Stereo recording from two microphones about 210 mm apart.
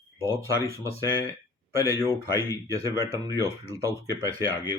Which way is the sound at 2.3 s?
15° left (ahead or behind).